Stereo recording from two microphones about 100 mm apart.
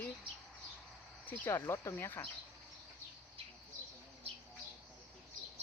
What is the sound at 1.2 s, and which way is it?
Speech, 20° left (ahead or behind).